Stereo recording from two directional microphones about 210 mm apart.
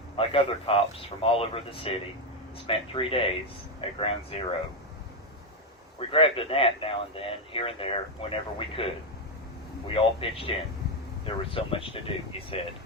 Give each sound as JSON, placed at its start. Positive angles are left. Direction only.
{"t": 0.2, "sound": "speech", "side_deg": 25}
{"t": 6.0, "sound": "speech", "side_deg": 25}
{"t": 9.9, "sound": "speech", "side_deg": 25}
{"t": 11.5, "sound": "speech", "side_deg": 25}